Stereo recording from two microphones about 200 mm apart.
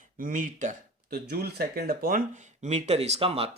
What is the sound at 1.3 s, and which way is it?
Speech, 50° right (ahead or behind).